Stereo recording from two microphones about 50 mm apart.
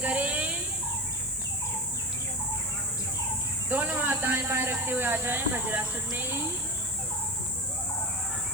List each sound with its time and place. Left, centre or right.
0.0 s insect: right
3.7 s a sound: right
4.5 s speech: right